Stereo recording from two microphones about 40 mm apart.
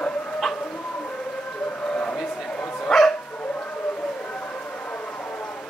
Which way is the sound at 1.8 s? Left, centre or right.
Centre.